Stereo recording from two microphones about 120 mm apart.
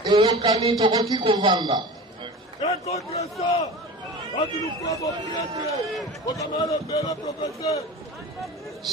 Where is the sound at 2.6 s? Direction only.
60° left (ahead or behind).